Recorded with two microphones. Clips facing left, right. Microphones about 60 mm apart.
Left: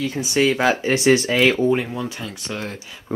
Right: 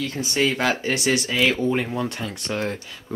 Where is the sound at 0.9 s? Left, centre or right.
Left.